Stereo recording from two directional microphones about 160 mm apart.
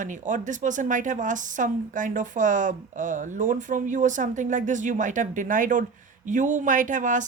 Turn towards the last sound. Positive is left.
turn(degrees=-55)  # may be behind; listen again after turning